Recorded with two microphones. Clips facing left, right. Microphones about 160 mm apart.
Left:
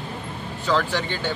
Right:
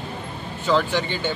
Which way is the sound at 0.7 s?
Centre (ahead or behind).